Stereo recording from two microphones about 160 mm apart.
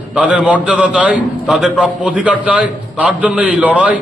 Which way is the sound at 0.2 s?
10° right (ahead or behind).